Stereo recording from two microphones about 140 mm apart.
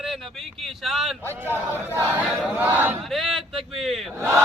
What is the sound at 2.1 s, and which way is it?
Battle cry, 10° right (ahead or behind).